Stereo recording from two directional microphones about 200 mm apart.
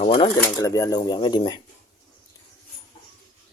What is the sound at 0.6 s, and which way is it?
Speech, 15° left (ahead or behind).